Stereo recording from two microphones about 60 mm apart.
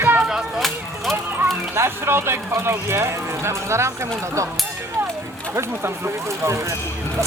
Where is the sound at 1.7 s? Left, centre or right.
Right.